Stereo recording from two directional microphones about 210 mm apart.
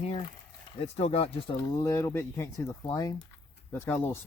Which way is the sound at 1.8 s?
15° left (ahead or behind).